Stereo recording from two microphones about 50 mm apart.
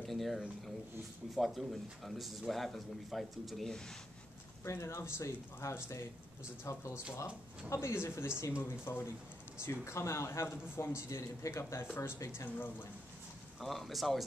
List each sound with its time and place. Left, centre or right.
0.0 s a sound: centre
1.3 s speech: centre
4.6 s speech: left
8.4 s speech: left
11.0 s speech: left
12.5 s speech: left
13.6 s speech: centre